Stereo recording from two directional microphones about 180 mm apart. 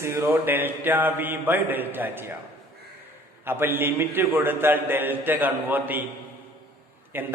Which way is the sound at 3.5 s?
10° right (ahead or behind).